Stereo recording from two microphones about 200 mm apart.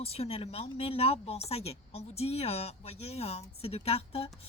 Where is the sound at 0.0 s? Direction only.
30° left (ahead or behind).